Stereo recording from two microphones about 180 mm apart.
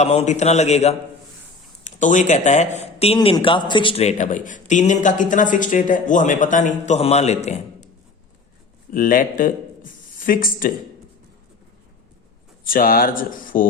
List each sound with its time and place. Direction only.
0.0 s a man's voice: 35° left (ahead or behind)
8.9 s speech: 50° left (ahead or behind)
12.6 s speech: 50° left (ahead or behind)